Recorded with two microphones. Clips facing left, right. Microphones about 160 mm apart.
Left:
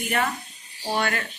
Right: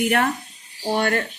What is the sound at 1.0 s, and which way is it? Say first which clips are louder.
Cricket: right 5 dB; 50° right (ahead or behind).